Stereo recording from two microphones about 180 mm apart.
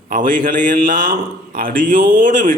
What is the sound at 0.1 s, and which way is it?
A man's voice, 50° right (ahead or behind).